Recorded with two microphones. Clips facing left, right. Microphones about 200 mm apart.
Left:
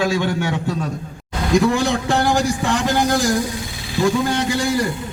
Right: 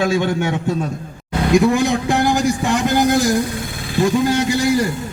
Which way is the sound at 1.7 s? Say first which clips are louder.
Right 2 dB; 15° right (ahead or behind).